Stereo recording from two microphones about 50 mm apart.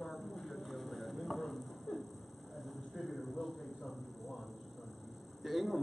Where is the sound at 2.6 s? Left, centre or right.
Centre.